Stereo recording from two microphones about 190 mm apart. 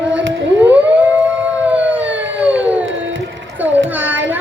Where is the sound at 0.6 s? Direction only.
10° right (ahead or behind).